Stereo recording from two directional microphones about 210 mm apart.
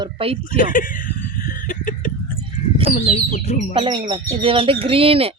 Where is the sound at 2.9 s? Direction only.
35° left (ahead or behind).